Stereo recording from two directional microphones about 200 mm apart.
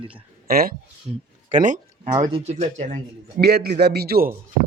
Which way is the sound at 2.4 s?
35° right (ahead or behind).